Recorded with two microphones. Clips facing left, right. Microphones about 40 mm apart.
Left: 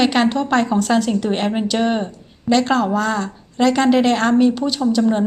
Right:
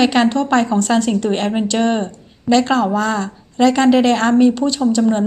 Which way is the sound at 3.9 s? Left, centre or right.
Left.